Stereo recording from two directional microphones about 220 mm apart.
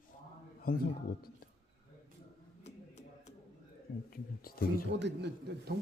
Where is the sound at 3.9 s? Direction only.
45° left (ahead or behind).